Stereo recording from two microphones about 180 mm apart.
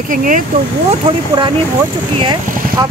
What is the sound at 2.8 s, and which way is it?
Speech, 20° right (ahead or behind).